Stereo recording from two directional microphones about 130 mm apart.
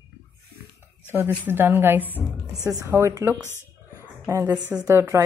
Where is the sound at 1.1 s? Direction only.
15° right (ahead or behind).